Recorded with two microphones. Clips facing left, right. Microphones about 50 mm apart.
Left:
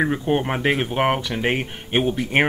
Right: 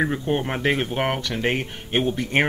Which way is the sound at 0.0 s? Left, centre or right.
Centre.